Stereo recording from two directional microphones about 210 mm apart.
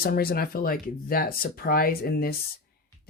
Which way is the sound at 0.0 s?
45° left (ahead or behind).